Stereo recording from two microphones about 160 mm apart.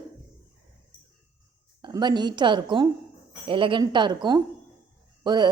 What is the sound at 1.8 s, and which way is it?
A woman's voice, 30° right (ahead or behind).